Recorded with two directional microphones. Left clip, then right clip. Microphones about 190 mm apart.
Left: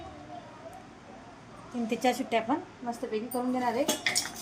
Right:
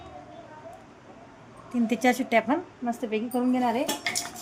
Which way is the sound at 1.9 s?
40° right (ahead or behind).